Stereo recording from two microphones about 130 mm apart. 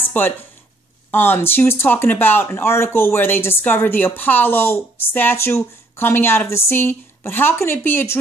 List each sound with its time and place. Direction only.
0.2 s speech: 15° left (ahead or behind)